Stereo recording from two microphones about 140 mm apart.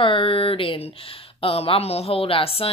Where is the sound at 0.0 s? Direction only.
40° left (ahead or behind).